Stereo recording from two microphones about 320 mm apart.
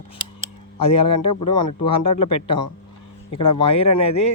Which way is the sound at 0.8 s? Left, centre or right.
Centre.